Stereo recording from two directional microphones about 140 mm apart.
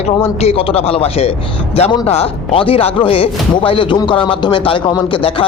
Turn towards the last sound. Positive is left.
turn(degrees=40)  # may be behind; listen again after turning